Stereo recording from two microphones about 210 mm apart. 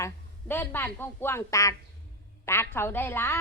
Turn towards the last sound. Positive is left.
turn(degrees=10)  # may be behind; listen again after turning